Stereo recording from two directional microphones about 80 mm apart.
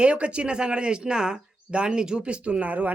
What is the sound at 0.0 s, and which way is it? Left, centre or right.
A man's voice, centre.